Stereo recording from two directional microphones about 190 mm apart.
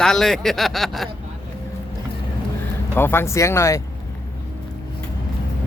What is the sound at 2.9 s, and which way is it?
Speech, 10° left (ahead or behind).